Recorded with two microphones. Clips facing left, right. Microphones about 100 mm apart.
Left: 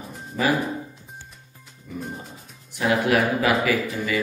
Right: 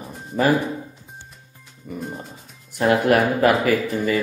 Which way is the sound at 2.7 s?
50° right (ahead or behind).